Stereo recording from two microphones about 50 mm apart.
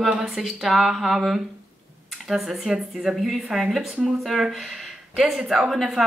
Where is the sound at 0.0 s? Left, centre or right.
Centre.